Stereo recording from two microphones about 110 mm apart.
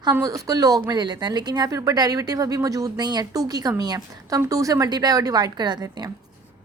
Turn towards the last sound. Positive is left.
turn(degrees=-40)  # may be behind; listen again after turning